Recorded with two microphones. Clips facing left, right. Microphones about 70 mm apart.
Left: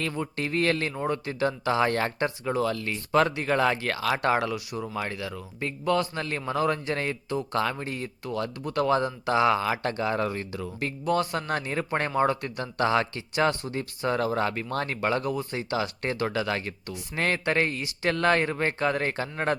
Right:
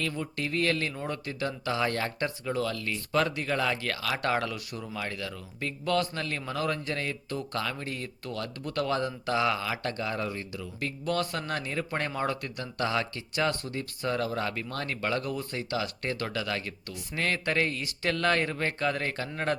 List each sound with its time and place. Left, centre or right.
0.0 s speech: left
2.1 s speech: left
4.2 s speech: centre
4.8 s a man's voice: left
6.1 s speech: left
7.3 s speech: centre
10.2 s speech: left
11.0 s speech: centre